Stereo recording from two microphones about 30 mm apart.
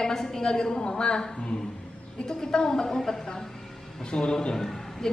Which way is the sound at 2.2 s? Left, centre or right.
Left.